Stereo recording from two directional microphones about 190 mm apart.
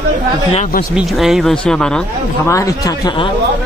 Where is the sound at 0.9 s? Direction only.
Centre (ahead or behind).